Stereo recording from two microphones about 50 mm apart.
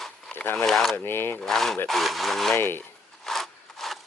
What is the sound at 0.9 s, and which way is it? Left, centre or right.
Speech, left.